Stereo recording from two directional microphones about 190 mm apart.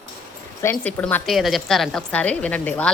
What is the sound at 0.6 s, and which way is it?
A woman's voice, 10° left (ahead or behind).